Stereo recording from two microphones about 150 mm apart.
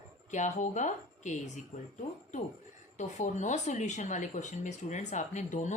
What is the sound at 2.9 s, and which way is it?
Speech, 50° left (ahead or behind).